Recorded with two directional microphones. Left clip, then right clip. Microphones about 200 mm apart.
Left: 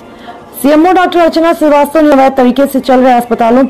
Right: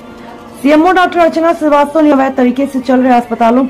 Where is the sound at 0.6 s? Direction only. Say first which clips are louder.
Left 1 dB; 15° left (ahead or behind).